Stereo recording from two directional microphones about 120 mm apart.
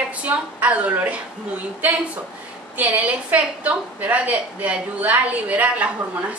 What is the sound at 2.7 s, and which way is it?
A woman's voice, 10° right (ahead or behind).